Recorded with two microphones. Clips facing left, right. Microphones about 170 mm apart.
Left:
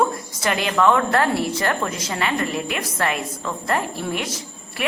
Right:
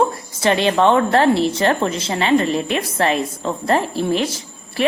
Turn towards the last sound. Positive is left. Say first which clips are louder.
# right 7 dB
turn(degrees=-30)  # may be behind; listen again after turning